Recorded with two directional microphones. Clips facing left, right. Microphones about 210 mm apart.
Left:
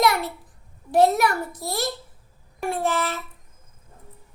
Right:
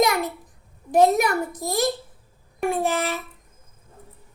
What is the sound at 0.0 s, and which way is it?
Babbling, 15° right (ahead or behind).